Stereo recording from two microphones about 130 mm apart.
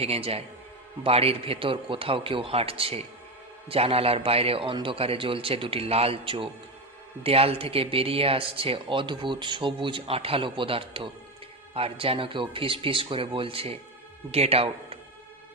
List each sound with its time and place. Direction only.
0.0 s speech: 50° right (ahead or behind)